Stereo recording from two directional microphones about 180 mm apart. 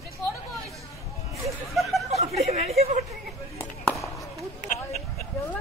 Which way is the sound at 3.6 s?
15° left (ahead or behind).